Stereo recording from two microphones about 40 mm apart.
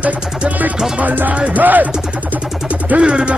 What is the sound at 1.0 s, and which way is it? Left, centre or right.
Speech, right.